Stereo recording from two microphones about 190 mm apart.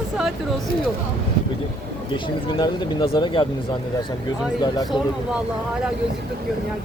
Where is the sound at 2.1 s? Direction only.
25° left (ahead or behind).